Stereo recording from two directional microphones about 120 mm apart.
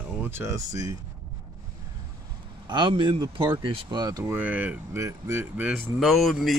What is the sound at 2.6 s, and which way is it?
A man's voice, 40° right (ahead or behind).